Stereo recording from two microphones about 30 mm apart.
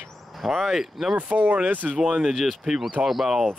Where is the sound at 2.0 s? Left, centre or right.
Right.